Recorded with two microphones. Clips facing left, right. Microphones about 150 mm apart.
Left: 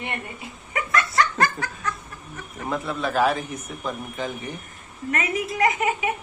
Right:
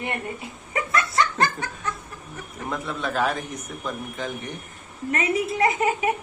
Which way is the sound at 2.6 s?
Centre (ahead or behind).